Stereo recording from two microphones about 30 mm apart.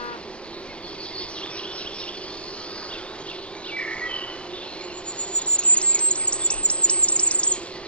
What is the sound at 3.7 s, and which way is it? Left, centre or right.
Bird, left.